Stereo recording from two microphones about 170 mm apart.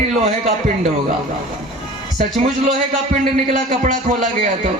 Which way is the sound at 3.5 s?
45° right (ahead or behind).